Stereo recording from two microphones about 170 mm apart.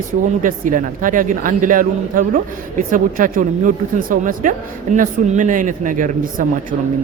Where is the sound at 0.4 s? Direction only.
50° right (ahead or behind).